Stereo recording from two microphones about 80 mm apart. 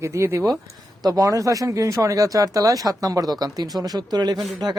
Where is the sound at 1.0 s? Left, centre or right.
Right.